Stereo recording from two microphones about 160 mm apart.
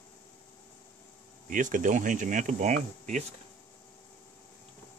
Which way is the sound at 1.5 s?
55° right (ahead or behind).